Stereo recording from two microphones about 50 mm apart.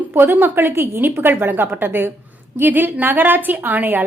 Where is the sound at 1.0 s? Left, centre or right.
Right.